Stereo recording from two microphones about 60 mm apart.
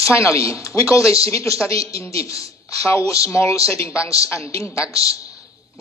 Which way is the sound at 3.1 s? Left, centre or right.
Left.